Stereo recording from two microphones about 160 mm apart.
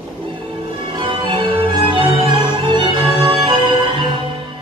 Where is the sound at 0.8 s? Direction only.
30° right (ahead or behind).